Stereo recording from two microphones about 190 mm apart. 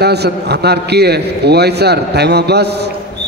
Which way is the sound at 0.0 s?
60° right (ahead or behind).